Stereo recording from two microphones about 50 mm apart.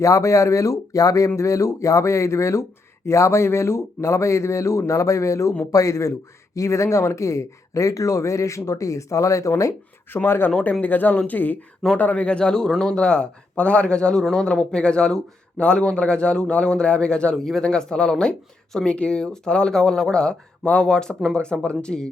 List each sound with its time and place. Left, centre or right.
0.0 s a man's voice: left
10.2 s speech: left
10.6 s a man's voice: left
17.3 s speech: centre